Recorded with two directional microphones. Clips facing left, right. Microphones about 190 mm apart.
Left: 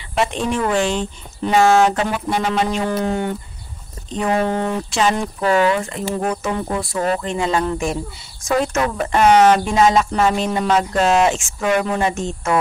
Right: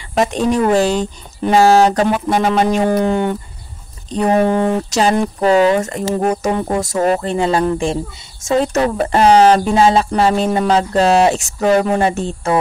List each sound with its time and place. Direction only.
0.1 s speech: 40° right (ahead or behind); by 3.3 s 65° right (ahead or behind)
4.1 s speech: 35° right (ahead or behind)
4.4 s speech: 15° right (ahead or behind)
4.9 s speech: 40° right (ahead or behind)
5.4 s speech: 25° right (ahead or behind)
5.8 s speech: 45° right (ahead or behind)